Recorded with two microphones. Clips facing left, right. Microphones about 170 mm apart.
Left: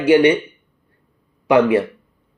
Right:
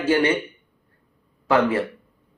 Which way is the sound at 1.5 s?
20° left (ahead or behind).